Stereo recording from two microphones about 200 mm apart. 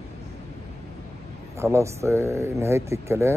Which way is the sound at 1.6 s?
15° right (ahead or behind).